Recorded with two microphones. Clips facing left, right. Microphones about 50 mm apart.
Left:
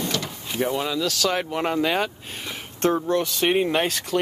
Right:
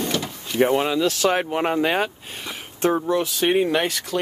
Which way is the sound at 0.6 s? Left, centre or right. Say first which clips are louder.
Right 5 dB; right.